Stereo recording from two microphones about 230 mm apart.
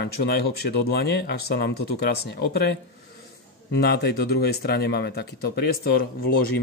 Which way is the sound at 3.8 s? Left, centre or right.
Left.